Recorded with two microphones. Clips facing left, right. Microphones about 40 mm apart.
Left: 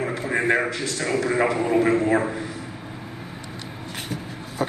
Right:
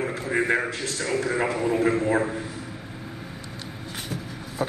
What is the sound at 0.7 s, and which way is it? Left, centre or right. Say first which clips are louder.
Speech: left 3 dB; left.